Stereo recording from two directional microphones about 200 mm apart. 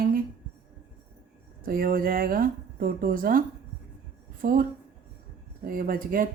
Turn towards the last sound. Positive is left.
turn(degrees=-45)  # may be behind; listen again after turning